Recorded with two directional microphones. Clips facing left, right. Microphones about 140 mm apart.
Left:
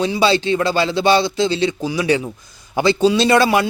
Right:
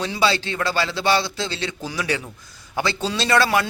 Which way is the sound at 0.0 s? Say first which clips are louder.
Left 6 dB; 20° left (ahead or behind).